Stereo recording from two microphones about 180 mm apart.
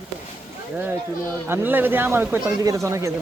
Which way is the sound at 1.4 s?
10° right (ahead or behind).